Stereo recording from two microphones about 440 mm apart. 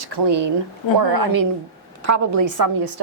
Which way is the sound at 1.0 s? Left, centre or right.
Right.